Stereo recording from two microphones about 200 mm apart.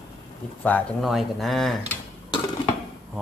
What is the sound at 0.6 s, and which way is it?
Speech, 5° left (ahead or behind).